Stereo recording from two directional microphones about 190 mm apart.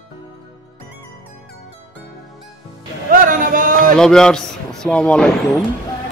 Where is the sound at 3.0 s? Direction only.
45° right (ahead or behind).